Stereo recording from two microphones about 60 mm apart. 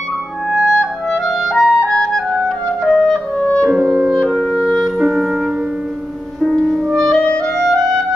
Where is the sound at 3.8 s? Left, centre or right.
Centre.